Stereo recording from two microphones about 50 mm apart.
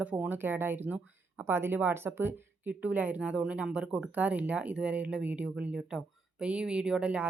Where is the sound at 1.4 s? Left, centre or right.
Right.